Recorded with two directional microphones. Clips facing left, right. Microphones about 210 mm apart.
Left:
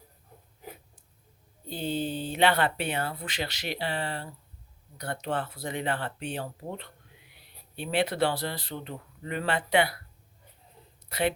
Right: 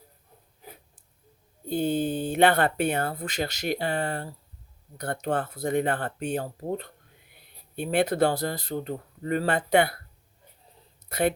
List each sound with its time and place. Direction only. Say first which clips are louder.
1.6 s speech: right 6 dB; 50° right (ahead or behind)
11.1 s speech: right 3 dB; 45° right (ahead or behind)